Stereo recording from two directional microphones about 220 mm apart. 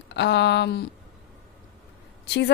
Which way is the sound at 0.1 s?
50° left (ahead or behind).